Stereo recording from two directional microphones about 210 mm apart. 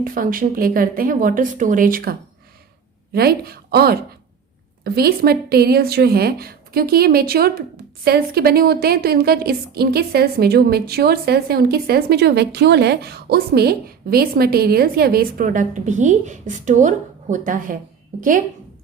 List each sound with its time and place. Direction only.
0.0 s a woman's voice: 40° right (ahead or behind)